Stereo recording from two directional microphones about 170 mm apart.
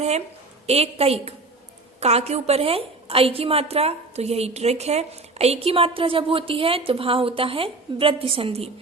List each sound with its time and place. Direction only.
0.7 s a woman's voice: 35° right (ahead or behind)